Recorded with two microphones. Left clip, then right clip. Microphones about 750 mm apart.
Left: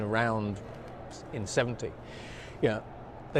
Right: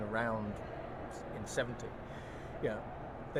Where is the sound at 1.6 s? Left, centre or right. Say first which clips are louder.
Left 8 dB; left.